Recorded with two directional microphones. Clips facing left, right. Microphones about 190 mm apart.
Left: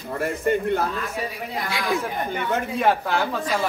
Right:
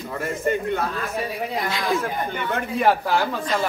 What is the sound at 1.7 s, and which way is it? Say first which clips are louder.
Speech: left 1 dB; 15° left (ahead or behind).